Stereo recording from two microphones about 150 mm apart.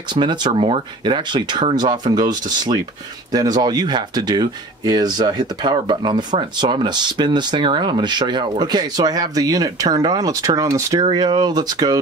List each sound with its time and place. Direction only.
0.1 s speech: 30° right (ahead or behind)